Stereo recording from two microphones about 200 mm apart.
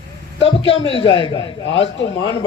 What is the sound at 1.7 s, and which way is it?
Speech, 70° left (ahead or behind).